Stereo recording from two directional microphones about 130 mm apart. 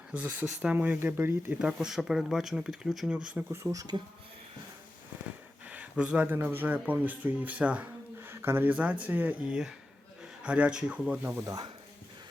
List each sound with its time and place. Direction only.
0.1 s speech: 10° right (ahead or behind)
1.5 s speech: 5° right (ahead or behind)
3.5 s speech: 25° right (ahead or behind)
5.6 s speech: 10° right (ahead or behind)